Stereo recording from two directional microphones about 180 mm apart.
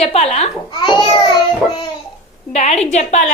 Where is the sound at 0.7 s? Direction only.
25° left (ahead or behind).